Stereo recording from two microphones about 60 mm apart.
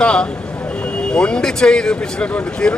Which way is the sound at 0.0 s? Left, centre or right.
Centre.